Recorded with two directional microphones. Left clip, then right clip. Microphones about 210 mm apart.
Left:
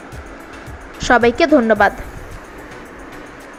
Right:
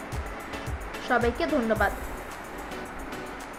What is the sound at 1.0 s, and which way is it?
Speech, 40° left (ahead or behind).